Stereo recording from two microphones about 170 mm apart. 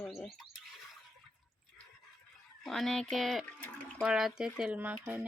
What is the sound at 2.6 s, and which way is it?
Speech, centre (ahead or behind).